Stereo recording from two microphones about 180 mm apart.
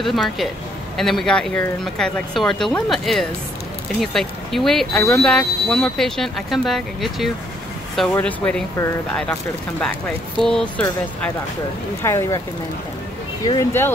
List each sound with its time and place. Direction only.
0.0 s speech: centre (ahead or behind); by 12.4 s 15° left (ahead or behind)
13.6 s speech: 15° left (ahead or behind)